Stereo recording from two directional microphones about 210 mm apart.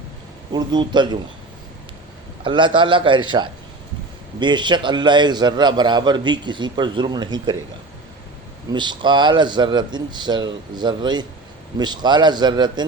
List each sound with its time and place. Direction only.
0.5 s a man's voice: 20° right (ahead or behind)
2.4 s a man's voice: 25° right (ahead or behind)
8.7 s a man's voice: 20° right (ahead or behind)